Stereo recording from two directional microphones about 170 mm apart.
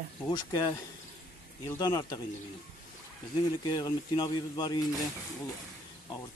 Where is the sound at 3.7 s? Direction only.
20° left (ahead or behind).